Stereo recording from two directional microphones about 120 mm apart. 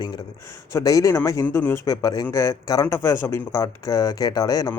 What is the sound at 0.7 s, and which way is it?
Speech, 30° left (ahead or behind).